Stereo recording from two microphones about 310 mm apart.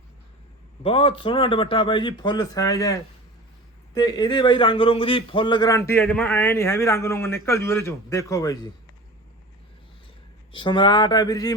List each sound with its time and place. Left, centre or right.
0.8 s speech: centre
10.5 s speech: centre